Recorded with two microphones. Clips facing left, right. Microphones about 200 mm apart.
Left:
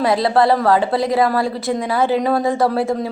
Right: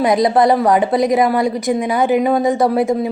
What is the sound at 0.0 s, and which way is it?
A woman's voice, 20° right (ahead or behind).